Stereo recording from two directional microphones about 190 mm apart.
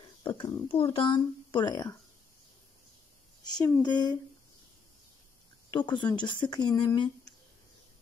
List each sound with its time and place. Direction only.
0.2 s a child's voice: 20° left (ahead or behind)
3.5 s a child's voice: 20° left (ahead or behind)
5.7 s a child's voice: 25° left (ahead or behind)